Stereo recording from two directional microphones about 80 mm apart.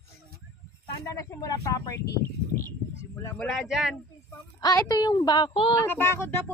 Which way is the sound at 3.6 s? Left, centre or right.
Centre.